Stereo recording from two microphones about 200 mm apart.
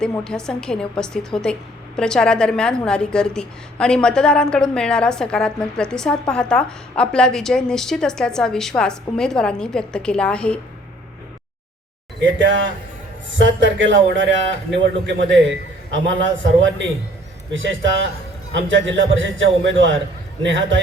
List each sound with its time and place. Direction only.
0.0 s a woman's voice: 5° left (ahead or behind)
12.4 s a man's voice: 65° right (ahead or behind)